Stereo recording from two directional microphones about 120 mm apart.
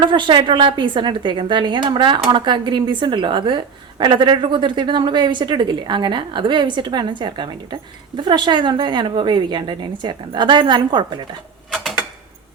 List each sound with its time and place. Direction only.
0.0 s a woman's voice: 40° right (ahead or behind)
11.7 s typewriter: centre (ahead or behind)